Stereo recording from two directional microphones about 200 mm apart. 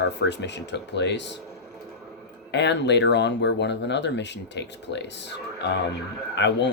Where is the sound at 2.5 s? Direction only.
60° left (ahead or behind).